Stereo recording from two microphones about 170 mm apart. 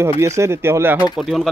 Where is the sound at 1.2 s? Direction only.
Centre (ahead or behind).